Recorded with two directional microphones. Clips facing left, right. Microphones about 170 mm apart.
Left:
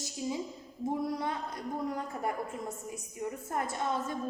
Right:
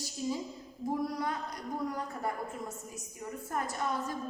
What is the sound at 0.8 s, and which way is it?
Speech, 25° left (ahead or behind).